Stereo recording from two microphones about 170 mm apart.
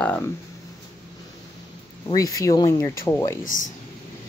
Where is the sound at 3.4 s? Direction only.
50° left (ahead or behind).